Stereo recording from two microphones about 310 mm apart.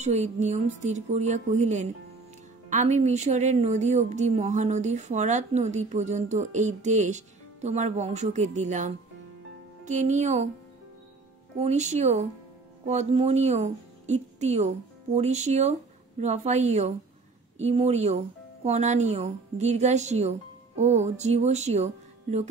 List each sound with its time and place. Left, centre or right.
0.0 s a woman's voice: right
11.5 s a woman's voice: right